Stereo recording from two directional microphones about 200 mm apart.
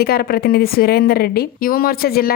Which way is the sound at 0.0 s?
50° left (ahead or behind).